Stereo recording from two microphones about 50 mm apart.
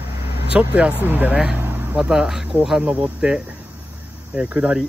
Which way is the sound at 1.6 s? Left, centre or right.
Right.